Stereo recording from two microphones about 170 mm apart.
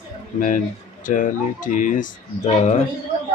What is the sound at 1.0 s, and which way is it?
Speech, 50° left (ahead or behind).